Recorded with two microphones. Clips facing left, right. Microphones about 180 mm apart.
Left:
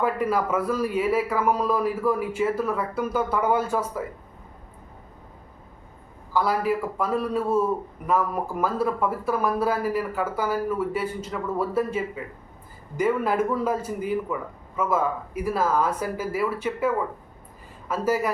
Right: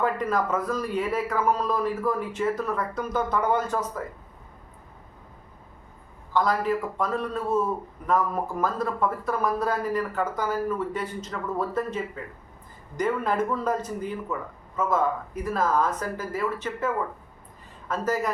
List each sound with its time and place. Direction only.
0.0 s speech: 10° left (ahead or behind)
6.3 s speech: 10° left (ahead or behind)